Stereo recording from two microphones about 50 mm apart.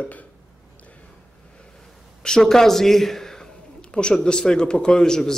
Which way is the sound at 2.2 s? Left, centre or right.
Centre.